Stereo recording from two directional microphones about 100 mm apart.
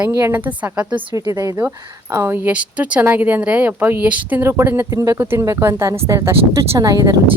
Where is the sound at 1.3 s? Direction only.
35° right (ahead or behind).